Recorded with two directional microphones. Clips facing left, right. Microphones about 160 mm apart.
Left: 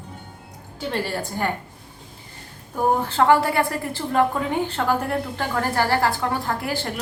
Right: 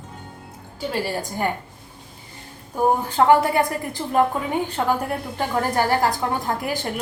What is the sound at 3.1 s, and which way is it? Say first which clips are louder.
A woman's voice: right 2 dB; 15° right (ahead or behind).